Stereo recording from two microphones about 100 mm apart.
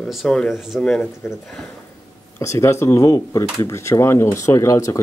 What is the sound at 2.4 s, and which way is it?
Speech, 30° left (ahead or behind).